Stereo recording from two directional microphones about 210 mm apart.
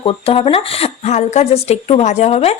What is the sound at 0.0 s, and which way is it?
Speech, 25° left (ahead or behind).